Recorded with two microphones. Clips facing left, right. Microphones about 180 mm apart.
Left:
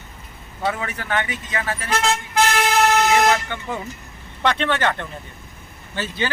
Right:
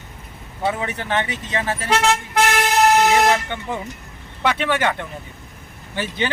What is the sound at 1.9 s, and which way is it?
Speech, 65° right (ahead or behind).